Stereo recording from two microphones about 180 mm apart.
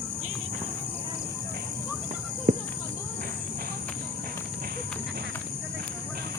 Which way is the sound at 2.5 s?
60° right (ahead or behind).